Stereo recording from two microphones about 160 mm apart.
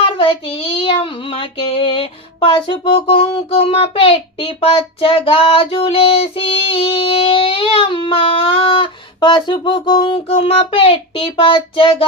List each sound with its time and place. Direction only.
0.0 s child singing: 35° left (ahead or behind)